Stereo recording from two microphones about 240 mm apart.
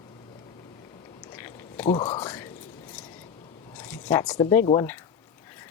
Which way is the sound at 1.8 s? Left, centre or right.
Left.